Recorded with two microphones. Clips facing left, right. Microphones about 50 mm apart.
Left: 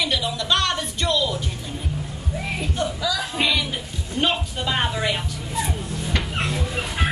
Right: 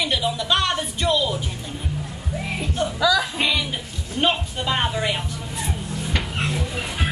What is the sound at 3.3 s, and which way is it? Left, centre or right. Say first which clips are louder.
A woman's voice: even; centre.